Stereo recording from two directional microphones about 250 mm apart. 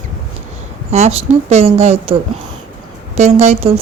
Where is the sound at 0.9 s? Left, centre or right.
Right.